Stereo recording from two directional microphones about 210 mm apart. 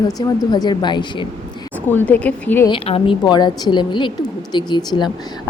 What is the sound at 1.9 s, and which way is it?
Speech, 10° left (ahead or behind).